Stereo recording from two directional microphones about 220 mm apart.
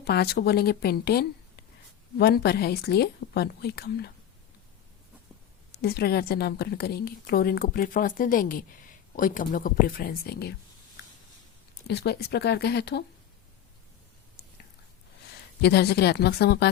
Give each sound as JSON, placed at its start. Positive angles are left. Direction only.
{"t": 0.0, "sound": "a woman's voice", "side_deg": 45}
{"t": 5.8, "sound": "a woman's voice", "side_deg": 45}
{"t": 11.9, "sound": "a woman's voice", "side_deg": 50}
{"t": 15.6, "sound": "a woman's voice", "side_deg": 50}